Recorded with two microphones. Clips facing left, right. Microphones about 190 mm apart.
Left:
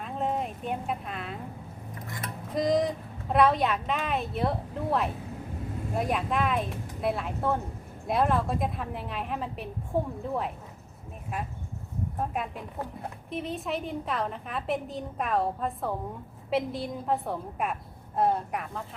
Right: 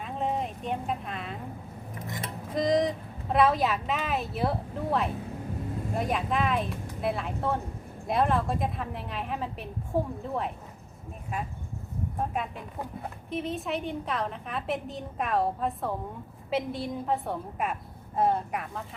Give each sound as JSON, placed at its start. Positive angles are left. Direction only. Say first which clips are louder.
{"t": 0.0, "sound": "vehicle", "louder": "even", "side_deg": 0}
{"t": 2.0, "sound": "a sound", "louder": "right 2 dB", "side_deg": -20}
{"t": 2.6, "sound": "vehicle", "louder": "even", "side_deg": 0}
{"t": 3.3, "sound": "a woman's voice", "louder": "left 1 dB", "side_deg": 0}
{"t": 12.3, "sound": "a woman's voice", "louder": "even", "side_deg": 0}